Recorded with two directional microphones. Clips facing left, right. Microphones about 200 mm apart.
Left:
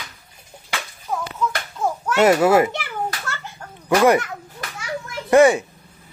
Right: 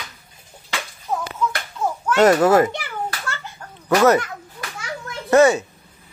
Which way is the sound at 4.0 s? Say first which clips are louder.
Even; 10° left (ahead or behind).